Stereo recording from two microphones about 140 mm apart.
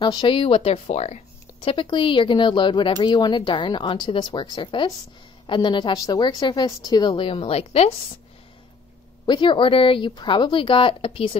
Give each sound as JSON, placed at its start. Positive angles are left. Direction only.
{"t": 0.0, "sound": "speech", "side_deg": 35}
{"t": 1.6, "sound": "speech", "side_deg": 35}
{"t": 9.2, "sound": "speech", "side_deg": 35}